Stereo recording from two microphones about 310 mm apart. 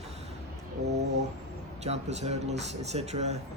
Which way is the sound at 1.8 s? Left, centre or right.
Right.